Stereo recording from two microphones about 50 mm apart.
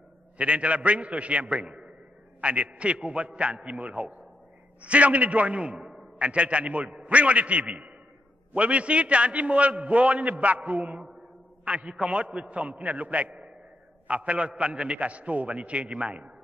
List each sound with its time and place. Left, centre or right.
0.4 s a man's voice: right
5.8 s a sound: centre
6.1 s a man's voice: right